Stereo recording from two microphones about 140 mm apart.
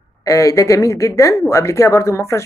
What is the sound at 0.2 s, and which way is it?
A woman's voice, 25° left (ahead or behind).